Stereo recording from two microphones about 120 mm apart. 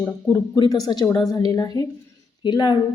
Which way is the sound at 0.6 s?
30° left (ahead or behind).